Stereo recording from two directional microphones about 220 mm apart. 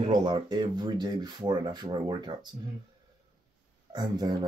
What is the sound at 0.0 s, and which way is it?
Speech, 20° right (ahead or behind).